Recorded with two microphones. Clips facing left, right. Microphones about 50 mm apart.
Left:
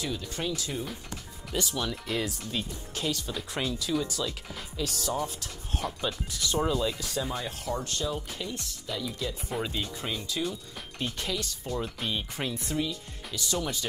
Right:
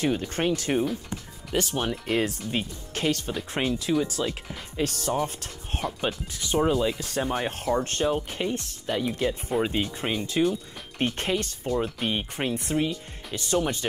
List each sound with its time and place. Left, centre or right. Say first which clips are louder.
0.0 s speech: right 8 dB; right
7.1 s speech: right 5 dB; right